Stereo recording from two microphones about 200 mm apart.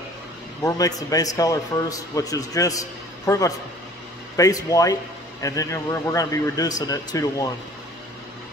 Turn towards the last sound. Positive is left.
turn(degrees=20)  # may be behind; listen again after turning